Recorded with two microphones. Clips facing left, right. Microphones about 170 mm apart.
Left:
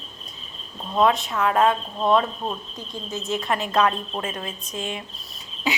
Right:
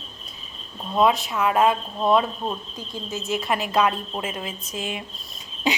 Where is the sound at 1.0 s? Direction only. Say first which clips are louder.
Even; 5° right (ahead or behind).